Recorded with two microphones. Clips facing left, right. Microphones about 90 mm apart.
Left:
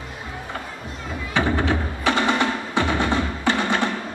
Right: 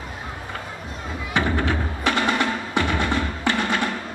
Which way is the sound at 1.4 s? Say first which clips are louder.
Left 1 dB; 20° left (ahead or behind).